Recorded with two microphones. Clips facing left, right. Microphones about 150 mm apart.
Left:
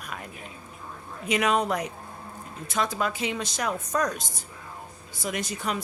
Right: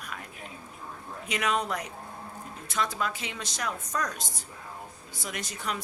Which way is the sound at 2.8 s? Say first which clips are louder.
Left 4 dB; 15° left (ahead or behind).